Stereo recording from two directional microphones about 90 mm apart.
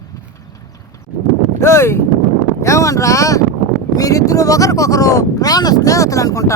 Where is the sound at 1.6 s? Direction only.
30° left (ahead or behind).